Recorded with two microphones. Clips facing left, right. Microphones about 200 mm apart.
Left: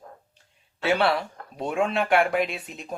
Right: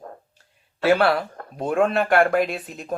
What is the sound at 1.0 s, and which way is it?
Speech, centre (ahead or behind).